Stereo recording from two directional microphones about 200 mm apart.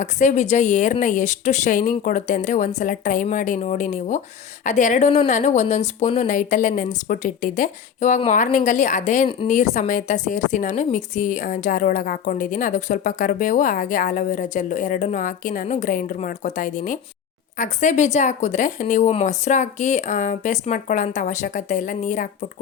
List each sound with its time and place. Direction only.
0.0 s a woman's voice: 35° left (ahead or behind)